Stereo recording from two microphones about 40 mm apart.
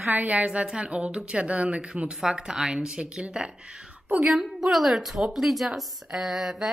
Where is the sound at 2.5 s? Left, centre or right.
Right.